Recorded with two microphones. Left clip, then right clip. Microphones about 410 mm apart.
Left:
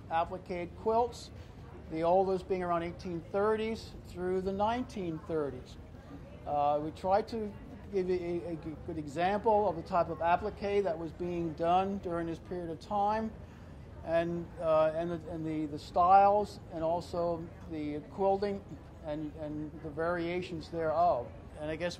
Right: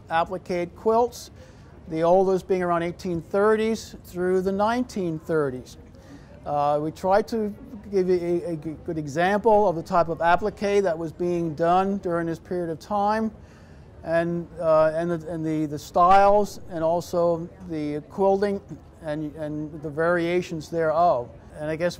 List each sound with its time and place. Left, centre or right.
0.1 s a man's voice: right